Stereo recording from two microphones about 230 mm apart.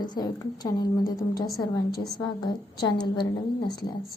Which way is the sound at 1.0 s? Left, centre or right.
Left.